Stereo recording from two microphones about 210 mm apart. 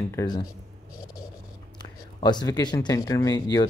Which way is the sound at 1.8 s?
20° left (ahead or behind).